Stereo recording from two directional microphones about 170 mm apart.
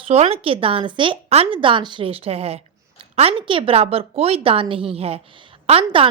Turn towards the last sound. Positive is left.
turn(degrees=-35)  # may be behind; listen again after turning